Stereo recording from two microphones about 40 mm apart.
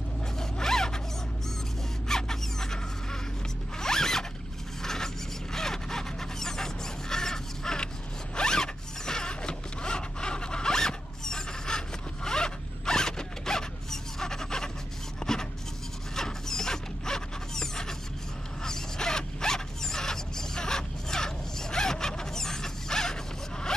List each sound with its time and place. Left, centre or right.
0.4 s zipper: centre
2.0 s zipper: centre
15.1 s a sound: centre
16.2 s mechanisms: centre
18.6 s zipper: centre